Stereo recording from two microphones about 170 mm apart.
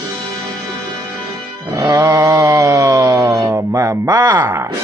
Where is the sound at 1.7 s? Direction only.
20° right (ahead or behind).